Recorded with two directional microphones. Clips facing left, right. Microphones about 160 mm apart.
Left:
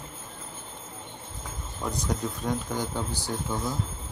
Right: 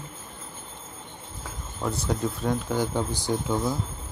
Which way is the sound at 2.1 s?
10° right (ahead or behind).